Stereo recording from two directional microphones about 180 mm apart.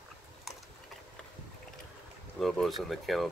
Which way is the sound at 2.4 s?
Centre (ahead or behind).